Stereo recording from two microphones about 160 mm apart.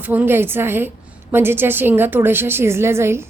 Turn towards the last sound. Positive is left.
turn(degrees=-15)  # may be behind; listen again after turning